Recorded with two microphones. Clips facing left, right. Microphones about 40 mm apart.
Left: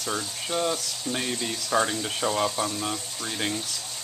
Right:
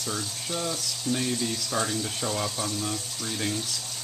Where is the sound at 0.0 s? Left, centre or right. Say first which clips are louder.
Left 2 dB; left.